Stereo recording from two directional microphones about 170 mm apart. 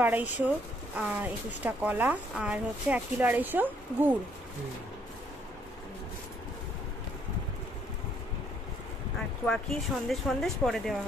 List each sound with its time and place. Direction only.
0.0 s speech: 10° right (ahead or behind)
9.5 s speech: centre (ahead or behind)